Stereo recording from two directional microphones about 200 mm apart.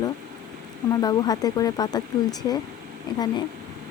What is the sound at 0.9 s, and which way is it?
Speech, 20° left (ahead or behind).